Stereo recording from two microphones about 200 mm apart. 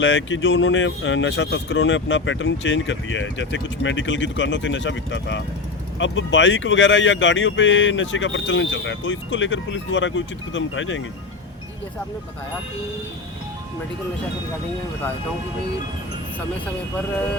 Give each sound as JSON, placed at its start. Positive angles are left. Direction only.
{"t": 0.0, "sound": "speech", "side_deg": 65}